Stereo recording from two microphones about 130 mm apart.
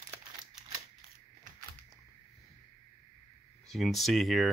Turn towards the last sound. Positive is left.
turn(degrees=0)  # may be behind; listen again after turning